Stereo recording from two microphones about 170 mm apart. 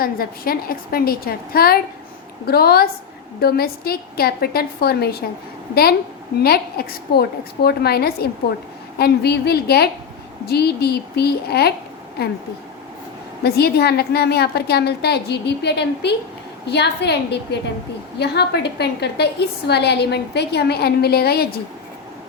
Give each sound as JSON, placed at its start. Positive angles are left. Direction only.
{"t": 0.0, "sound": "a woman's voice", "side_deg": 60}
{"t": 6.3, "sound": "a woman's voice", "side_deg": 65}
{"t": 13.4, "sound": "a woman's voice", "side_deg": 70}